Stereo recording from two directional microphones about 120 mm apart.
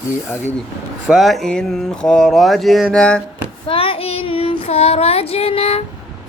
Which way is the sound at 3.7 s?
50° left (ahead or behind).